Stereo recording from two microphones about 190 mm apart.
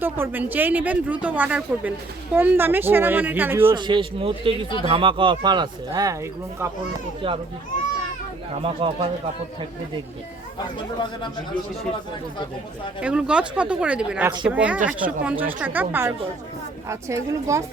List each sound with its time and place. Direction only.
0.0 s speech: 10° right (ahead or behind)
3.8 s speech: 25° right (ahead or behind)
7.2 s speech: 25° right (ahead or behind)
8.6 s speech: 30° right (ahead or behind)
10.6 s speech: 25° left (ahead or behind)
13.0 s speech: 5° right (ahead or behind)